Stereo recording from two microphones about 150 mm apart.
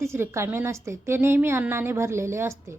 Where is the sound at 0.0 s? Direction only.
20° right (ahead or behind).